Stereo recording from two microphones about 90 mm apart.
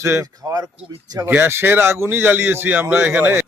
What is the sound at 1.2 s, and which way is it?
A man's voice, 25° right (ahead or behind).